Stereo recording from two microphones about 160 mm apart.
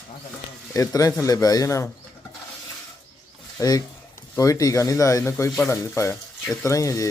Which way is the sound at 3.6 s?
20° left (ahead or behind).